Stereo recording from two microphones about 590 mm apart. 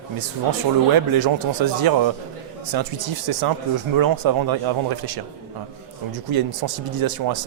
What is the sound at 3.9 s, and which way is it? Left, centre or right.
Speech, right.